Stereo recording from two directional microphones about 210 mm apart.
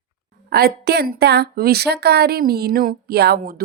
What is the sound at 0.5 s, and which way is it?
Speech, 50° right (ahead or behind).